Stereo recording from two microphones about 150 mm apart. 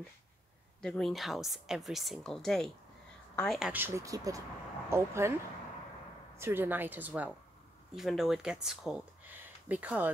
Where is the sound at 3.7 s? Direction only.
15° right (ahead or behind).